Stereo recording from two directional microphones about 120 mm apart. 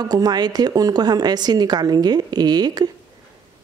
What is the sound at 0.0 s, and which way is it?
Speech, 35° right (ahead or behind).